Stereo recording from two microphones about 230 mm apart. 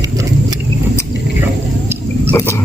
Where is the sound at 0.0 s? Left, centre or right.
Centre.